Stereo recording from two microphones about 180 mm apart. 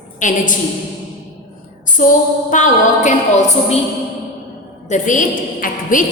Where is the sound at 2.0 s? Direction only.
50° left (ahead or behind).